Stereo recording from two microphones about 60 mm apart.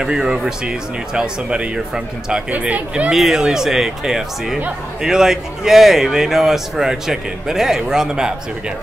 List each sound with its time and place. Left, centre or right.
0.0 s a man's voice: centre
3.1 s a man's voice: centre